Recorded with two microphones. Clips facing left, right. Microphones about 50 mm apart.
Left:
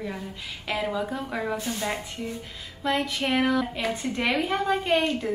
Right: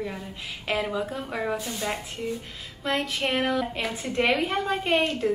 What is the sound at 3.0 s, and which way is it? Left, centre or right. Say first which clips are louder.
A woman's voice: left 1 dB; centre.